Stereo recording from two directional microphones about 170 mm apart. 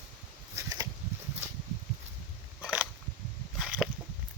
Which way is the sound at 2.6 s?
5° right (ahead or behind).